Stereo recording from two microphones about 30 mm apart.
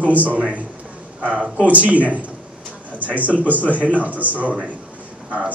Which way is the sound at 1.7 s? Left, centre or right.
Right.